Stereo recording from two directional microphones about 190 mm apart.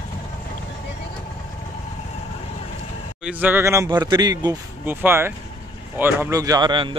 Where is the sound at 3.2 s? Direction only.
10° right (ahead or behind).